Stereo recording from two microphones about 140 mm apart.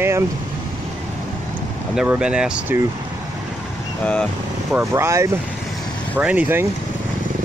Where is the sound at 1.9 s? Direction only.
10° right (ahead or behind).